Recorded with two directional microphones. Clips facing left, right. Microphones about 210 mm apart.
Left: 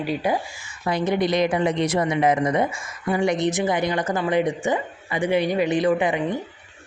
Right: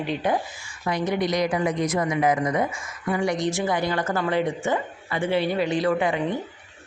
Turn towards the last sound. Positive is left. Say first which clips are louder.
# left 2 dB
turn(degrees=15)  # may be behind; listen again after turning